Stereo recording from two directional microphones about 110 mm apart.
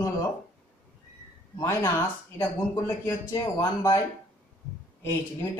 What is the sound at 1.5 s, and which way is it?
Speech, 25° left (ahead or behind).